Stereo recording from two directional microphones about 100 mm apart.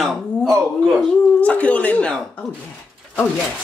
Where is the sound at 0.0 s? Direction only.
Centre (ahead or behind).